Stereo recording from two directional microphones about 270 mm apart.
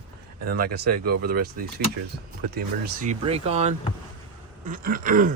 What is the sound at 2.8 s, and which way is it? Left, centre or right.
Speech, right.